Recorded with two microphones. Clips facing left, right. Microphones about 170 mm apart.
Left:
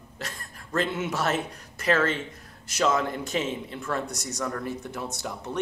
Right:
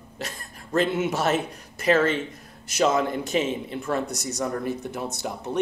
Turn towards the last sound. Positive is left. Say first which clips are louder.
# right 3 dB
turn(degrees=-20)  # may be behind; listen again after turning